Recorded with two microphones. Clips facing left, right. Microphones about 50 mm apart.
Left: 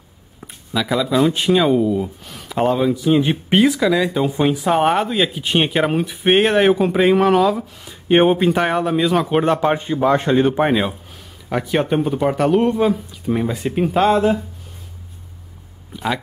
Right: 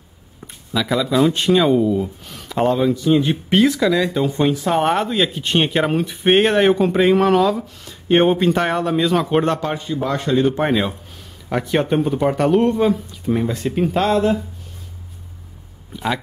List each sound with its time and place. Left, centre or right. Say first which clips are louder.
0.4 s speech: even; centre
3.3 s a man's voice: even; centre
3.6 s speech: even; centre
9.6 s a man's voice: left 5 dB; left
10.6 s speech: left 2 dB; centre